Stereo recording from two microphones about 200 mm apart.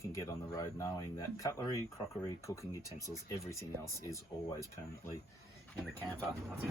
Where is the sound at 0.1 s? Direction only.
15° left (ahead or behind).